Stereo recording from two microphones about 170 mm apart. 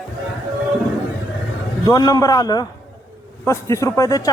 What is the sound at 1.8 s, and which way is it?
A man's voice, 20° left (ahead or behind).